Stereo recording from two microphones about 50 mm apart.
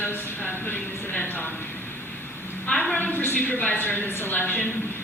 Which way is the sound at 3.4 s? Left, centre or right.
Left.